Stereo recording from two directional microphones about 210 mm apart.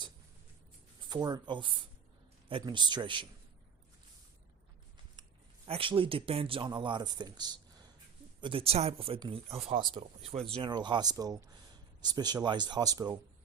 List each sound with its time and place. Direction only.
1.1 s speech: 20° right (ahead or behind)
5.6 s speech: 25° right (ahead or behind)